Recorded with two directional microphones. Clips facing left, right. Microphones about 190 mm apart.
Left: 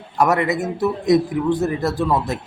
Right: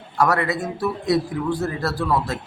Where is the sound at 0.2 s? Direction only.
20° left (ahead or behind).